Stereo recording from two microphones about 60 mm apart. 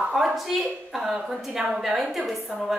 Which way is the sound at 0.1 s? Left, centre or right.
Centre.